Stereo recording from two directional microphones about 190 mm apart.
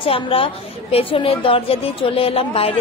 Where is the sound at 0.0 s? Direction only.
30° left (ahead or behind).